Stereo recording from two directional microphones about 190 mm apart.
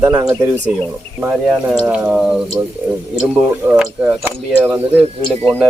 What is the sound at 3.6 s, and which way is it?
Speech, 10° right (ahead or behind).